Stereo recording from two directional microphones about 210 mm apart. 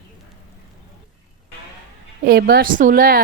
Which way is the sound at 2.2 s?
50° right (ahead or behind).